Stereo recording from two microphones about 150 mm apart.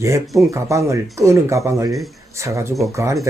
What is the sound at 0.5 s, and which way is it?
Speech, 20° right (ahead or behind).